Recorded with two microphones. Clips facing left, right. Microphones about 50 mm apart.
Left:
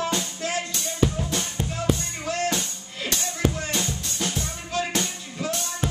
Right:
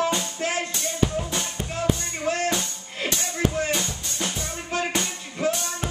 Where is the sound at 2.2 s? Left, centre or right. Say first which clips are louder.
Right 2 dB; right.